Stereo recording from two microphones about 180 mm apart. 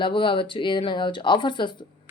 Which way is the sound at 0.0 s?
30° left (ahead or behind).